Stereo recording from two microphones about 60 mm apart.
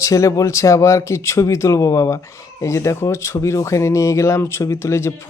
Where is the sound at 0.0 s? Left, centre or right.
Left.